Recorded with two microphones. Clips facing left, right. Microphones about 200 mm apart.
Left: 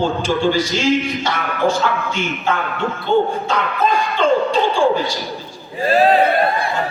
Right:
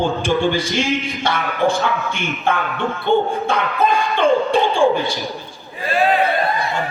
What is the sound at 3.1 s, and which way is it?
Speech, 20° right (ahead or behind).